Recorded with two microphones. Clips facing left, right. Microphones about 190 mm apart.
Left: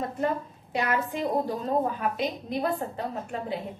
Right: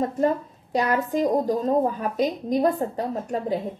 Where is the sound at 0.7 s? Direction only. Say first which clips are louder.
Right 5 dB; 40° right (ahead or behind).